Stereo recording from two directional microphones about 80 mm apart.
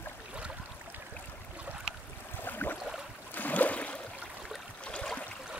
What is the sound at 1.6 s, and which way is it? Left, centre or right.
Boat, centre.